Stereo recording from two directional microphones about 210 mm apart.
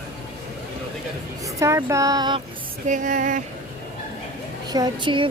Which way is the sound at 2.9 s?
40° right (ahead or behind).